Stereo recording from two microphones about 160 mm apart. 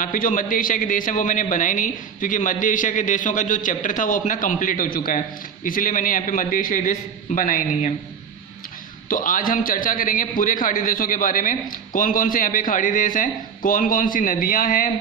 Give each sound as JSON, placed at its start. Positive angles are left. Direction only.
{"t": 0.0, "sound": "a man's voice", "side_deg": 55}
{"t": 9.1, "sound": "a man's voice", "side_deg": 60}